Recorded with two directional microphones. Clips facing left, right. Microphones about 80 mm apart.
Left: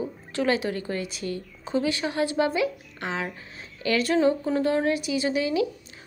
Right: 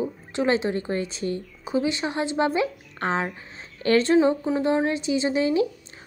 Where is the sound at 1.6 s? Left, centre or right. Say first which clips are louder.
Right 1 dB; centre.